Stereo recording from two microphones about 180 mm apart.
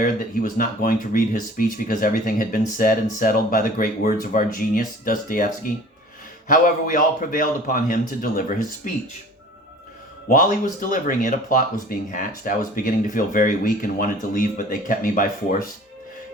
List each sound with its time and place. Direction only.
0.0 s speech: 50° left (ahead or behind)
10.2 s speech: 50° left (ahead or behind)